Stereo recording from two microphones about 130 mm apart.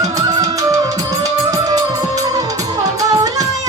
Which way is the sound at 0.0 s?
30° right (ahead or behind).